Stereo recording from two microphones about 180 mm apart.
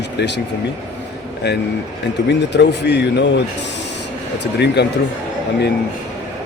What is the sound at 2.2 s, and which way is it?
Speech, 70° left (ahead or behind).